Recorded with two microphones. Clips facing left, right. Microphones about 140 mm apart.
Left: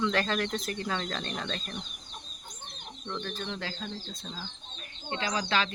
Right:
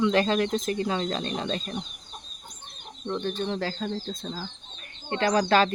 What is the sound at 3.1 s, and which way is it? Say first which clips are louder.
Speech: right 7 dB; 25° right (ahead or behind).